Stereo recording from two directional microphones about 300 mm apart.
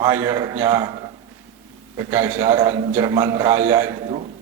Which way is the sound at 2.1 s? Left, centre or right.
Centre.